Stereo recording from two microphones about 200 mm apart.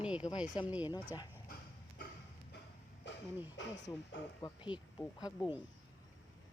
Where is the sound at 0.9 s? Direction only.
20° left (ahead or behind).